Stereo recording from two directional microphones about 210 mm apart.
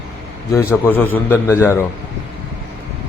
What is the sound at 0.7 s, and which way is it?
A man's voice, 10° left (ahead or behind).